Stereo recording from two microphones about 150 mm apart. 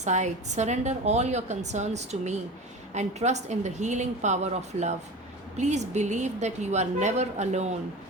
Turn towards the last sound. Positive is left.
turn(degrees=-50)  # may be behind; listen again after turning